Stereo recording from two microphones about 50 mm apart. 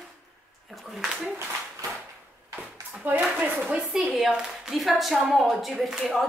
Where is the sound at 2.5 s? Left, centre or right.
Right.